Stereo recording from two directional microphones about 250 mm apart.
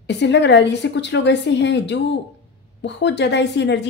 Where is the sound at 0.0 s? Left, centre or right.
Left.